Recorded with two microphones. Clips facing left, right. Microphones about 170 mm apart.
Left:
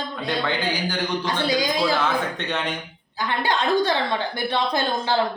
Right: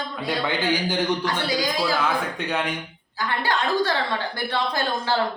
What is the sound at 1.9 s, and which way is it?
Speech, 10° right (ahead or behind).